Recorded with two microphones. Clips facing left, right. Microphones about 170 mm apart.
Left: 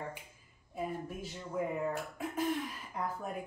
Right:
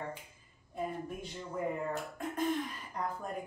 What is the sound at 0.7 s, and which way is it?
Speech, 5° left (ahead or behind).